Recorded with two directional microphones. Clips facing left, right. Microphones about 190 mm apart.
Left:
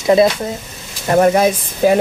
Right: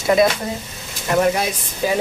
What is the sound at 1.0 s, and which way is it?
Speech, 40° left (ahead or behind).